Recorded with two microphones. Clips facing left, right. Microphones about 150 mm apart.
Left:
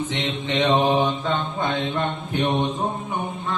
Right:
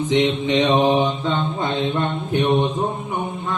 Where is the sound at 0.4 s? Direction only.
15° right (ahead or behind).